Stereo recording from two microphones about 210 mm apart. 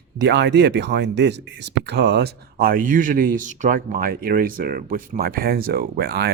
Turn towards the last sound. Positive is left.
turn(degrees=-50)  # may be behind; listen again after turning